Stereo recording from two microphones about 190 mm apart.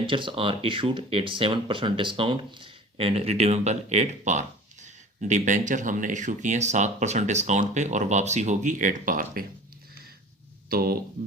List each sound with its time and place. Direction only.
0.0 s speech: 25° right (ahead or behind); by 9.5 s 50° right (ahead or behind)
10.7 s speech: 50° right (ahead or behind)